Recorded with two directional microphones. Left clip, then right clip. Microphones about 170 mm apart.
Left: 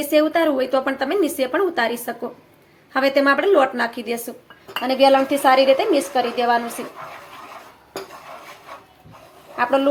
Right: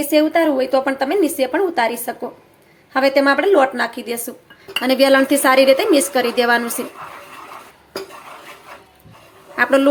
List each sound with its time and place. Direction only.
0.0 s a woman's voice: 5° right (ahead or behind)
4.8 s a woman's voice: 25° right (ahead or behind)
9.6 s speech: 30° right (ahead or behind)